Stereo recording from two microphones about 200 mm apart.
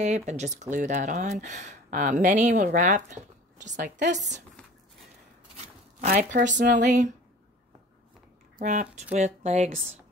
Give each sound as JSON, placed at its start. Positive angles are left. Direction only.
{"t": 0.0, "sound": "speech", "side_deg": -35}
{"t": 5.6, "sound": "speech", "side_deg": -45}
{"t": 8.5, "sound": "speech", "side_deg": -40}